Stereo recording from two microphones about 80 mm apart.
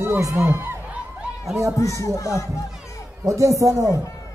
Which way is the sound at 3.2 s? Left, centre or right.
Right.